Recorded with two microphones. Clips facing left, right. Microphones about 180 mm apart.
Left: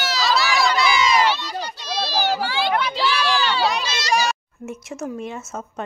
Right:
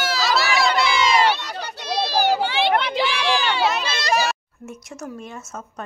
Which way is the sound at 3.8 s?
55° right (ahead or behind).